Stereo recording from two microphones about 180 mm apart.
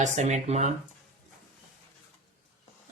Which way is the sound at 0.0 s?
40° right (ahead or behind).